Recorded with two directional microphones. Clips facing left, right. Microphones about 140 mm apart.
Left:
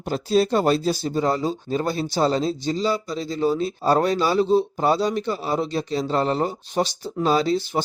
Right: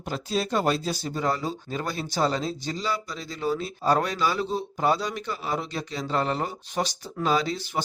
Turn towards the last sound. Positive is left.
turn(degrees=30)  # may be behind; listen again after turning